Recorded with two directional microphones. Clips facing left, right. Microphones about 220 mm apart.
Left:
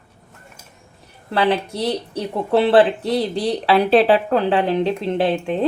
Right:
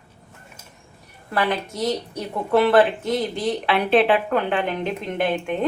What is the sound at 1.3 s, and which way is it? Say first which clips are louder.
A woman's voice: left 5 dB; 30° left (ahead or behind).